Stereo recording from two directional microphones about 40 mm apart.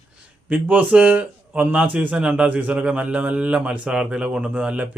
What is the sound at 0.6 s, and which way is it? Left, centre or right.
Speech, right.